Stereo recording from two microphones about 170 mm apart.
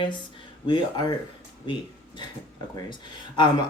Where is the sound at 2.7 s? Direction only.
25° left (ahead or behind).